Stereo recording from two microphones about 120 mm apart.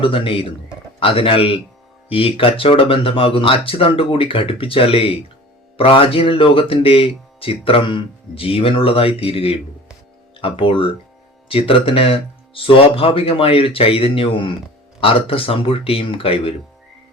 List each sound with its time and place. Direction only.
0.0 s speech: 50° left (ahead or behind)